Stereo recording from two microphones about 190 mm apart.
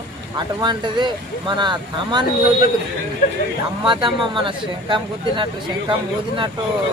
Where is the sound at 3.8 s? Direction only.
25° right (ahead or behind).